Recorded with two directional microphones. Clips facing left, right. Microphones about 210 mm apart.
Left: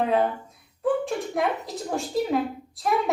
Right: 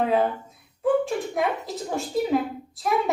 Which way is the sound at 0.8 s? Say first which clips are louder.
Right 2 dB; centre (ahead or behind).